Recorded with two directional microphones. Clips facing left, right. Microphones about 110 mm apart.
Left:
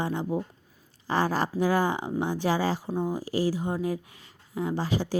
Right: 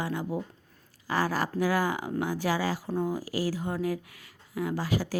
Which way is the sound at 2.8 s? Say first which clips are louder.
Left 1 dB; 15° left (ahead or behind).